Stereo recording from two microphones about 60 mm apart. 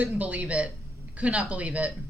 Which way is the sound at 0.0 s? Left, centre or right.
Right.